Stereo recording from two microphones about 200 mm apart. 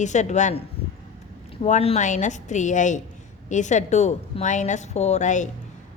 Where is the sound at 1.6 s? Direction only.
35° left (ahead or behind).